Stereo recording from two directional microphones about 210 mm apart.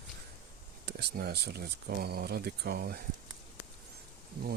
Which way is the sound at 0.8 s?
50° right (ahead or behind).